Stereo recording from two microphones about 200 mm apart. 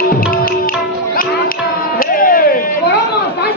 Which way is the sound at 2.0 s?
45° left (ahead or behind).